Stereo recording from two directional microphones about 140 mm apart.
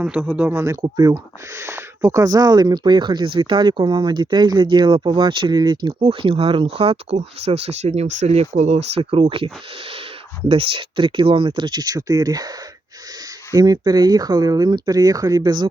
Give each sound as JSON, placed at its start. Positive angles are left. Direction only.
{"t": 0.0, "sound": "speech", "side_deg": -10}
{"t": 6.0, "sound": "speech", "side_deg": -45}
{"t": 10.5, "sound": "speech", "side_deg": -40}